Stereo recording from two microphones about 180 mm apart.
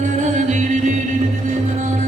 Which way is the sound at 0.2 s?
40° right (ahead or behind).